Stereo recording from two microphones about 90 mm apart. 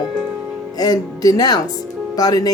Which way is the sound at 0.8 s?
45° left (ahead or behind).